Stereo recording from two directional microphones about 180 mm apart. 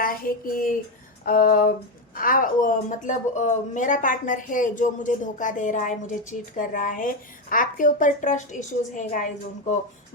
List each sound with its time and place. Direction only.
0.0 s a woman's voice: 55° left (ahead or behind)